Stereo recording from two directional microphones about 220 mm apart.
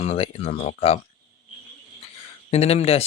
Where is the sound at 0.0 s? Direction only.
30° left (ahead or behind).